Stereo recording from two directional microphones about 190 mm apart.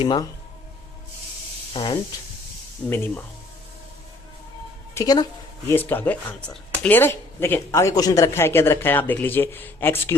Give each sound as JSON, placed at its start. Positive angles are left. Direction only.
{"t": 0.0, "sound": "speech", "side_deg": 25}
{"t": 1.7, "sound": "speech", "side_deg": 25}
{"t": 2.9, "sound": "speech", "side_deg": 10}
{"t": 4.9, "sound": "speech", "side_deg": 20}